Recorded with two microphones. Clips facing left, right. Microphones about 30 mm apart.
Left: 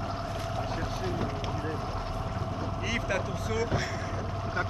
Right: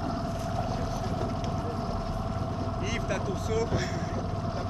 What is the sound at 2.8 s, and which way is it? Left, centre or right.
Speech, centre.